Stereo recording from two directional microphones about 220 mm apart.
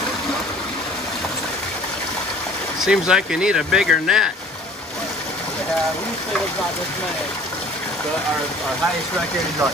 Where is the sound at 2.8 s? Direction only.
5° right (ahead or behind).